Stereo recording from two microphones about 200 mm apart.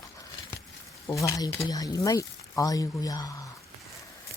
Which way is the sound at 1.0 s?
15° left (ahead or behind).